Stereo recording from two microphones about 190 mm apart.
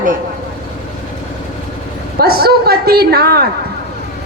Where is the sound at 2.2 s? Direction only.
55° right (ahead or behind).